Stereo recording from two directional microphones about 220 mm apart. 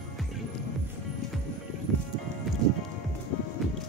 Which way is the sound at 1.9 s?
Centre (ahead or behind).